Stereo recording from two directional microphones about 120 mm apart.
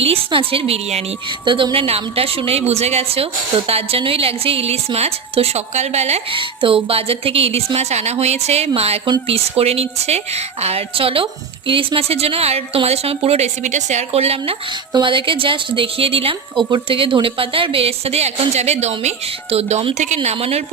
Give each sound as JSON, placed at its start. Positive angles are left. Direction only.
{"t": 0.0, "sound": "a woman's voice", "side_deg": -50}
{"t": 1.5, "sound": "a woman's voice", "side_deg": -45}
{"t": 6.3, "sound": "a woman's voice", "side_deg": -45}
{"t": 14.9, "sound": "a woman's voice", "side_deg": -45}
{"t": 20.1, "sound": "a woman's voice", "side_deg": -55}